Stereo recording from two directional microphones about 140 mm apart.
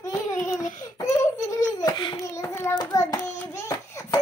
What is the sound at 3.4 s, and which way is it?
Hands, 20° left (ahead or behind).